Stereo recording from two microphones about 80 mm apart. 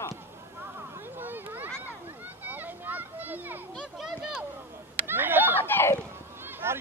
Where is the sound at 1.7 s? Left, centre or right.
Right.